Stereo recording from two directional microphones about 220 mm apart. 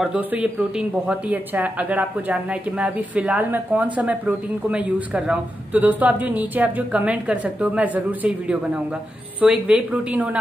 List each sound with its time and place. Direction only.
0.0 s a woman's voice: 5° right (ahead or behind)